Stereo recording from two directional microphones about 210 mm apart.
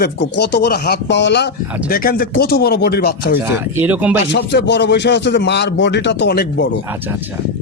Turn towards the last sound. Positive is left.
turn(degrees=50)  # may be behind; listen again after turning